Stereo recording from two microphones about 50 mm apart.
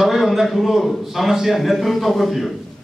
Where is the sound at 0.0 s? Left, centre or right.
Centre.